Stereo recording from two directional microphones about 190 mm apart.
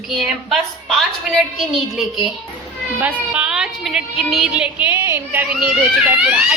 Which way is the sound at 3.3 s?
5° right (ahead or behind).